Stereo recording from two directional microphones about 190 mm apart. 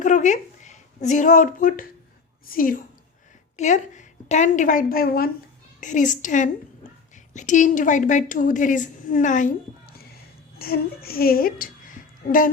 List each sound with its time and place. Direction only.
0.0 s a woman's voice: 40° left (ahead or behind)
10.6 s a woman's voice: 50° left (ahead or behind)